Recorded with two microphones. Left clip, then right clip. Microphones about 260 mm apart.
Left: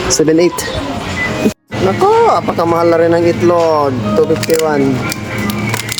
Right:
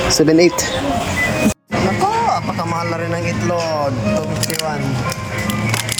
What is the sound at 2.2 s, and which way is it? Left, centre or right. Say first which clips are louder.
Speech: left 7 dB; centre.